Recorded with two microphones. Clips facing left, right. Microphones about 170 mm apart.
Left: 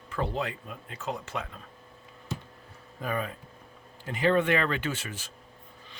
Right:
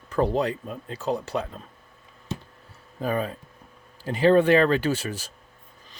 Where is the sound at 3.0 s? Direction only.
35° right (ahead or behind).